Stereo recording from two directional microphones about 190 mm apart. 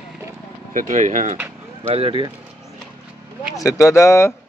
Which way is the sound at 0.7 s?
40° right (ahead or behind).